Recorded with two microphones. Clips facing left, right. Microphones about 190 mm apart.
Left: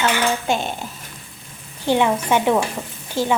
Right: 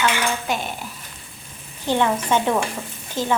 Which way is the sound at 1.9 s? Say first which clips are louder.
Left 2 dB; 15° left (ahead or behind).